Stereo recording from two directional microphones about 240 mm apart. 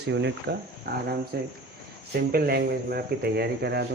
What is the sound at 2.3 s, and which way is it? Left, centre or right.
Speech, right.